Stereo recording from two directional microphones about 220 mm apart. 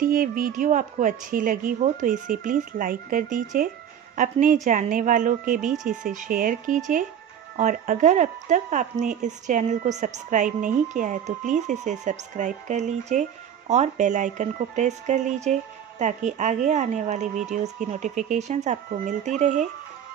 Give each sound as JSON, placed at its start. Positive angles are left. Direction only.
{"t": 0.0, "sound": "speech", "side_deg": -40}